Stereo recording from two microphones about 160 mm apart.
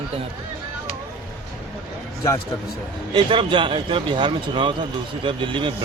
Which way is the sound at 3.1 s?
30° right (ahead or behind).